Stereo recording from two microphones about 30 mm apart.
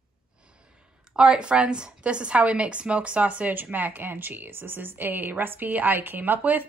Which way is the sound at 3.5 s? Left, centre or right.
Right.